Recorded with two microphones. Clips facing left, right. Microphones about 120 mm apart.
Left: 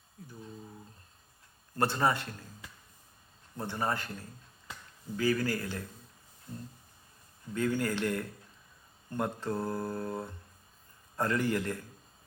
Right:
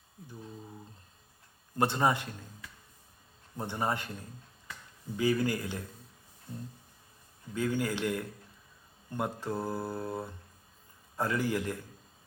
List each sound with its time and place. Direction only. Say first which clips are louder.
1.7 s speech: right 1 dB; 15° right (ahead or behind)
3.6 s a man's voice: right 1 dB; 15° right (ahead or behind)
7.5 s speech: left 1 dB; 10° right (ahead or behind)